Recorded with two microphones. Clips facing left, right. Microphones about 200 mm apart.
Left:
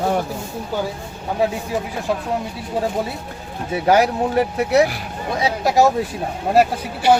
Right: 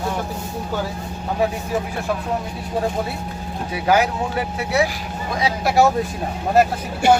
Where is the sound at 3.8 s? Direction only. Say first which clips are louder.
Left 3 dB; 35° left (ahead or behind).